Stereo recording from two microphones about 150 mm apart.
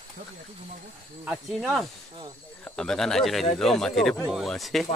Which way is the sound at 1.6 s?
Centre (ahead or behind).